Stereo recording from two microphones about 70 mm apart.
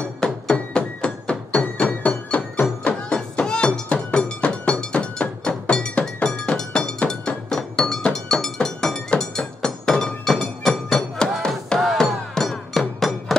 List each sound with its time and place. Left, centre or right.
0.2 s music: centre